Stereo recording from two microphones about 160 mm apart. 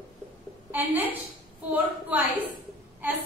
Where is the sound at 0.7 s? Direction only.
10° right (ahead or behind).